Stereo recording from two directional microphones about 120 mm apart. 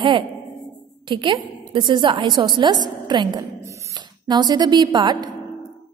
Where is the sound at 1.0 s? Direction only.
45° right (ahead or behind).